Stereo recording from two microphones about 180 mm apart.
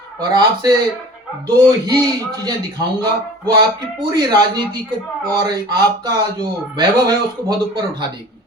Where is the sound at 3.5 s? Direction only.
25° right (ahead or behind).